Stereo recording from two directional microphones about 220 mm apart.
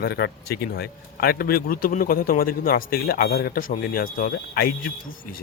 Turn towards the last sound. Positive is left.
turn(degrees=45)  # may be behind; listen again after turning